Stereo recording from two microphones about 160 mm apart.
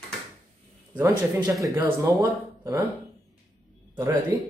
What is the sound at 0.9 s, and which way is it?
Speech, 20° right (ahead or behind).